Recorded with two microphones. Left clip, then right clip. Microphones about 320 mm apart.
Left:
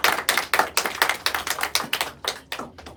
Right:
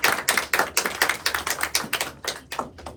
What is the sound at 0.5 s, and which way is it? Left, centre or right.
Tap, centre.